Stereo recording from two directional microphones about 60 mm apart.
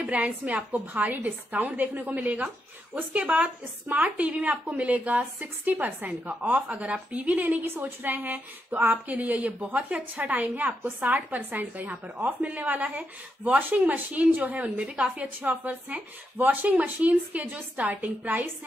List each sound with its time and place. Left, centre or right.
0.0 s a woman's voice: right